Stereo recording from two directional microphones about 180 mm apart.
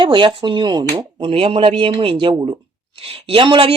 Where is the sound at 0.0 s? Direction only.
25° right (ahead or behind).